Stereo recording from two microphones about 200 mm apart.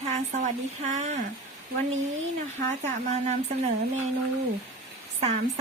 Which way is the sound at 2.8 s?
35° right (ahead or behind).